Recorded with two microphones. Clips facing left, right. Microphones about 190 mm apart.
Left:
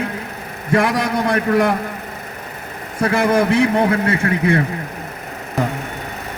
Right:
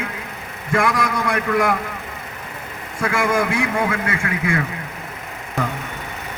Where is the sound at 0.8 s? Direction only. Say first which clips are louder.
Left 2 dB; 25° left (ahead or behind).